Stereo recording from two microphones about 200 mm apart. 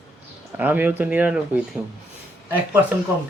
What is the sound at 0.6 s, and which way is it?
Speech, 10° right (ahead or behind).